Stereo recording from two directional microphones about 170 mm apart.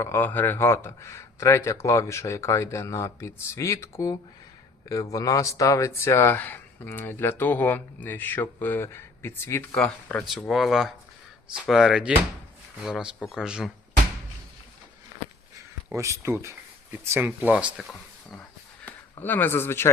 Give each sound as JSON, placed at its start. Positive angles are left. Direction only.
{"t": 0.0, "sound": "speech", "side_deg": 15}
{"t": 15.5, "sound": "speech", "side_deg": -15}